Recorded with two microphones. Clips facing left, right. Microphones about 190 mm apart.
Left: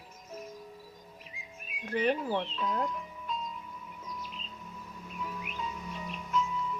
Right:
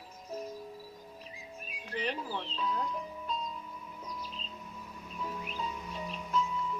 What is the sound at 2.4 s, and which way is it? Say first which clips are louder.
Speech: left 5 dB; 35° right (ahead or behind).